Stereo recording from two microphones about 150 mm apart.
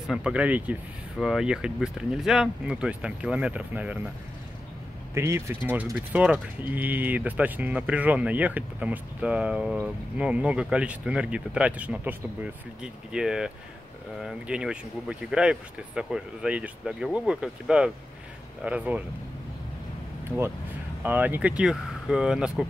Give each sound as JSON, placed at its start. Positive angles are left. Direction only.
{"t": 0.0, "sound": "speech", "side_deg": -5}
{"t": 5.1, "sound": "speech", "side_deg": -20}
{"t": 20.2, "sound": "speech", "side_deg": -15}